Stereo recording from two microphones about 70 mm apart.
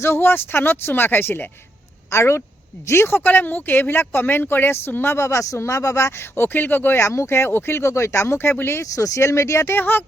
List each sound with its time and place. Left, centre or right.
0.0 s speech: left
2.0 s speech: left
7.0 s speech: left
8.4 s speech: left
8.8 s speech: left
9.7 s speech: left